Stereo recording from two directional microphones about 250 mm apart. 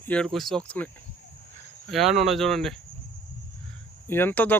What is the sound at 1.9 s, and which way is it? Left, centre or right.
Speech, centre.